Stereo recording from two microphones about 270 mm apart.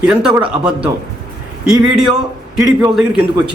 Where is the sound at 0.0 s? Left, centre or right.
Centre.